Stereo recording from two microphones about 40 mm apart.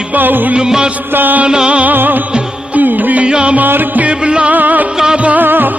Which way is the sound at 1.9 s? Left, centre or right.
Right.